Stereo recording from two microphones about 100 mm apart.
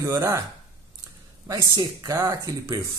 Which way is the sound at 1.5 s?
35° right (ahead or behind).